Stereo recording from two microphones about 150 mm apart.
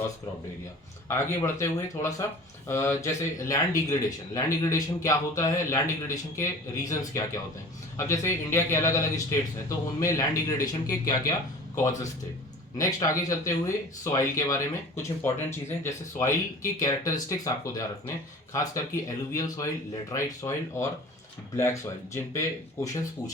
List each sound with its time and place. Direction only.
1.0 s speech: 15° left (ahead or behind)